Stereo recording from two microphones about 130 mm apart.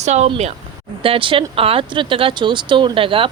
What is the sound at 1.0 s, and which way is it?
Speech, 45° right (ahead or behind).